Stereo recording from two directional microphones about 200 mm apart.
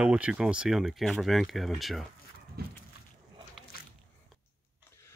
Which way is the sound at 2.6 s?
50° right (ahead or behind).